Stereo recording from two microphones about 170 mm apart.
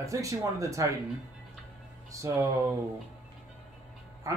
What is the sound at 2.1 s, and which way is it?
Speech, 20° right (ahead or behind).